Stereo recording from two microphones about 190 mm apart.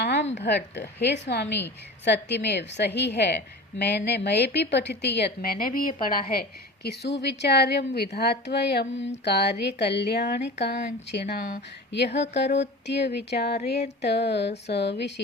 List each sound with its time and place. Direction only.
0.0 s a sound: 60° left (ahead or behind)
0.3 s a woman's voice: 65° left (ahead or behind); by 6.1 s 45° left (ahead or behind)
6.8 s a woman's voice: 60° left (ahead or behind)